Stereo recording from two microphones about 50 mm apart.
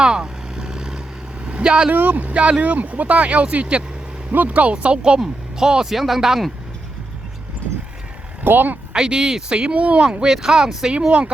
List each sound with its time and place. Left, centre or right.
0.0 s vehicle: centre
1.9 s speech: right
2.3 s speech: right; by 6.4 s centre
8.4 s speech: right
8.9 s speech: centre
10.1 s speech: centre
10.9 s speech: right